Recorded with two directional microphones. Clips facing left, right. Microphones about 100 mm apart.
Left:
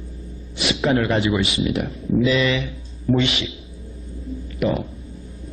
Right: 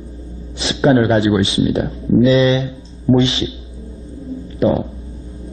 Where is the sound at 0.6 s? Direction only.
30° right (ahead or behind).